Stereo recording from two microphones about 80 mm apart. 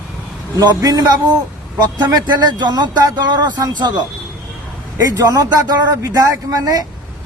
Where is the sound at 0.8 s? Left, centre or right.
Right.